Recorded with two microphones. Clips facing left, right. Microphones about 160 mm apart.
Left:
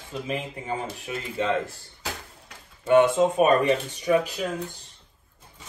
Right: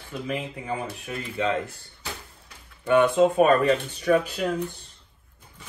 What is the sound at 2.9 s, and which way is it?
Speech, 25° left (ahead or behind).